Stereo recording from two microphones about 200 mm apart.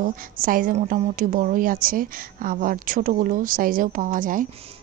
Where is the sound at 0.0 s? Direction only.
45° right (ahead or behind).